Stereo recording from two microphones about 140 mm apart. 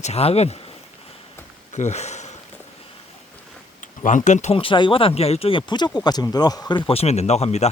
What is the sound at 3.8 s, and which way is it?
Speech, 65° left (ahead or behind).